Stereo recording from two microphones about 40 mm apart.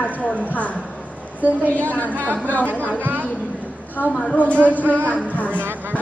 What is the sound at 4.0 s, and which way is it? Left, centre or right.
Speech, left.